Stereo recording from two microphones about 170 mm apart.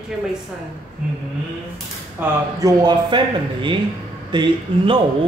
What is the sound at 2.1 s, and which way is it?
Speech, 20° right (ahead or behind).